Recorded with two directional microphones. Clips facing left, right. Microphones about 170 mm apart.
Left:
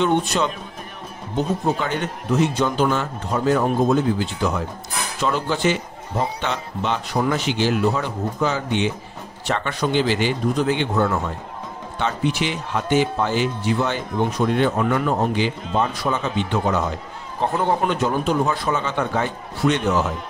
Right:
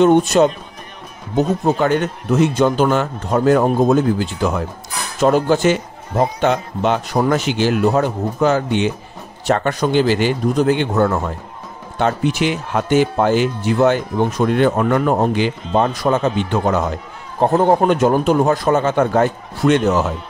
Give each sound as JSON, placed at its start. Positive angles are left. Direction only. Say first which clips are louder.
{"t": 0.0, "sound": "speech", "louder": "right 8 dB", "side_deg": -45}